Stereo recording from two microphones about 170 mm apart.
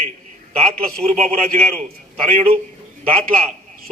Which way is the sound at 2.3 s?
40° right (ahead or behind).